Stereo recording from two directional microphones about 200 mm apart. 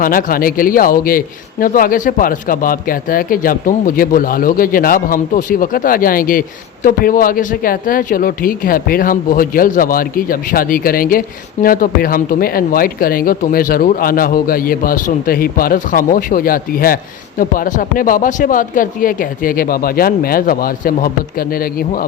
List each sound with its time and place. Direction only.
0.0 s speech: 45° left (ahead or behind)